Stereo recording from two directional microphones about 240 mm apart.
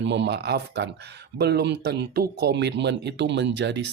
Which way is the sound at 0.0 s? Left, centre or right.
Right.